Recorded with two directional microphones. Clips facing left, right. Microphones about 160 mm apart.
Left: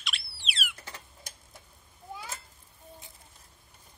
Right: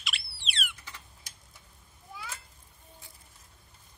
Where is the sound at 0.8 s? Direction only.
45° left (ahead or behind).